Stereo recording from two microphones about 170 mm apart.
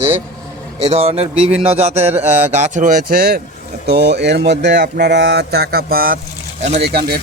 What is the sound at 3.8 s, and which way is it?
Speech, 75° right (ahead or behind).